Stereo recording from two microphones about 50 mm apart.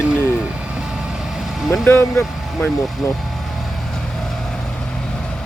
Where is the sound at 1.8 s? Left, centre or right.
Left.